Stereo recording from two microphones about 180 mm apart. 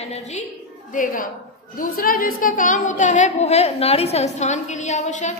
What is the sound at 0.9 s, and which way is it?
A woman's voice, 50° left (ahead or behind).